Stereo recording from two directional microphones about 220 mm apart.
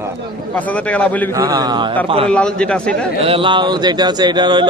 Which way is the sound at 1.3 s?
15° right (ahead or behind).